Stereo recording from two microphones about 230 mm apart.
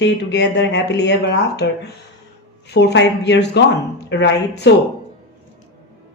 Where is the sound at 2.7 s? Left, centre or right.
Left.